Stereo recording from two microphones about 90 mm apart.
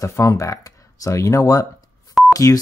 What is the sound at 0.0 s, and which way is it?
Speech, 35° left (ahead or behind).